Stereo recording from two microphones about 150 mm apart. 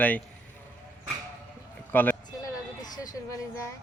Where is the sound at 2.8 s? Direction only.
25° left (ahead or behind).